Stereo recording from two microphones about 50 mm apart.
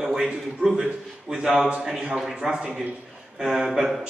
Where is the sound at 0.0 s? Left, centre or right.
Centre.